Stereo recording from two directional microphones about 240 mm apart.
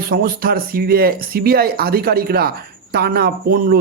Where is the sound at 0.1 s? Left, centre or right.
Right.